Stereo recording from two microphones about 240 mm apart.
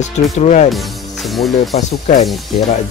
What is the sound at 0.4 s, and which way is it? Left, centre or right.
Speech, left.